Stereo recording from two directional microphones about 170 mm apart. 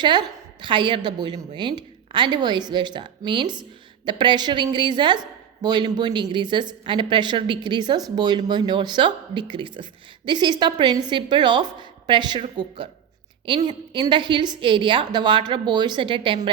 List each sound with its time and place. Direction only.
0.0 s a woman's voice: 25° right (ahead or behind)